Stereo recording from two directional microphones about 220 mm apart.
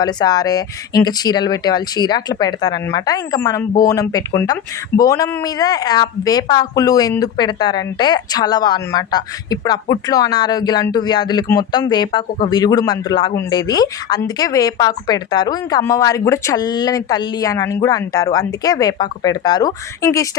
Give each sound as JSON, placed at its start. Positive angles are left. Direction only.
{"t": 0.0, "sound": "speech", "side_deg": 20}